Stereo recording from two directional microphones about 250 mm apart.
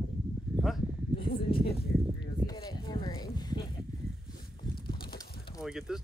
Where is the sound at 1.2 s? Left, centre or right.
Left.